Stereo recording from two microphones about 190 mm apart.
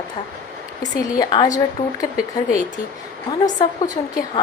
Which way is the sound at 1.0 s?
20° left (ahead or behind).